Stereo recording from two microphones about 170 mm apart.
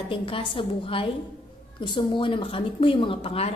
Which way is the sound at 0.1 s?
30° left (ahead or behind).